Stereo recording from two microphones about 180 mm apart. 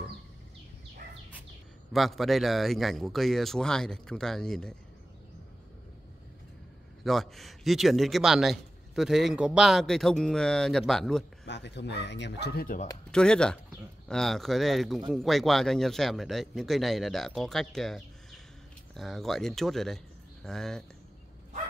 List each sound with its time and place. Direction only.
1.9 s a man's voice: centre (ahead or behind)
7.0 s a man's voice: centre (ahead or behind)
11.4 s speech: 75° left (ahead or behind); by 12.8 s 55° left (ahead or behind)
13.1 s a man's voice: 5° left (ahead or behind)